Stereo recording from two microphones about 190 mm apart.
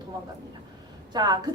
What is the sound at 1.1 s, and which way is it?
Speech, 20° right (ahead or behind).